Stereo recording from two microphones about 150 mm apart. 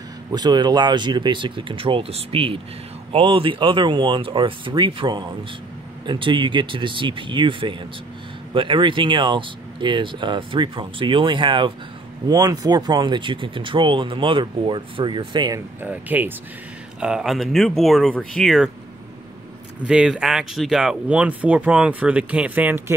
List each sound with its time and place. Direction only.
0.3 s speech: 30° right (ahead or behind)
15.8 s speech: 10° right (ahead or behind)
19.8 s speech: 5° right (ahead or behind)